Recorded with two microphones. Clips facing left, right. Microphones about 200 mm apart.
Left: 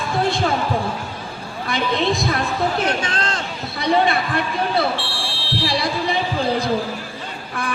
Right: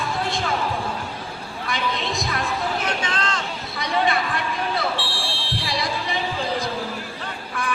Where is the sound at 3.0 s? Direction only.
35° left (ahead or behind).